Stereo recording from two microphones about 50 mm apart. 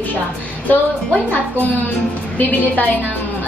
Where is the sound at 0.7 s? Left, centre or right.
Left.